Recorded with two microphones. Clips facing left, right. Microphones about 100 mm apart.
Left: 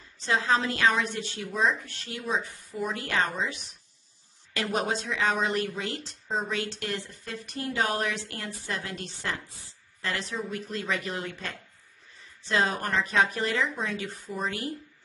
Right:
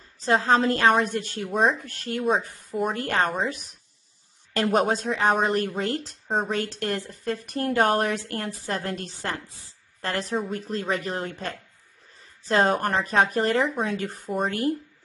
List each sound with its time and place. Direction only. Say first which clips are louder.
0.2 s speech: right 5 dB; 45° right (ahead or behind)